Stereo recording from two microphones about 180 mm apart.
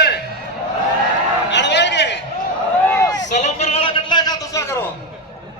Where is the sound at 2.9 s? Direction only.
20° left (ahead or behind).